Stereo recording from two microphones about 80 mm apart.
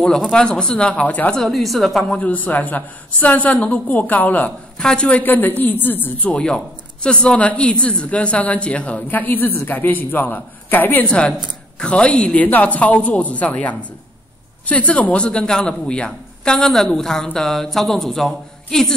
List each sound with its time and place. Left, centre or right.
0.3 s a woman's voice: centre
1.3 s a woman's voice: centre
2.1 s a man's voice: centre
4.7 s a woman's voice: centre
5.2 s a man's voice: left; by 18.9 s centre